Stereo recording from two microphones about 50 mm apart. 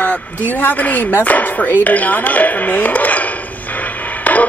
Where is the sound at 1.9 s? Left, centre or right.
Left.